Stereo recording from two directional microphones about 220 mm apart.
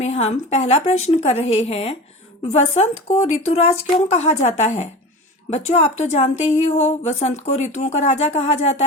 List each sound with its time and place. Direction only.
0.0 s speech: 30° left (ahead or behind)